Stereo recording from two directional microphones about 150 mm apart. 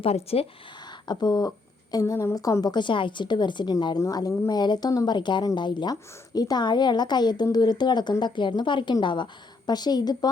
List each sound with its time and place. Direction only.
0.0 s speech: 40° left (ahead or behind)
1.0 s a woman's voice: 25° left (ahead or behind)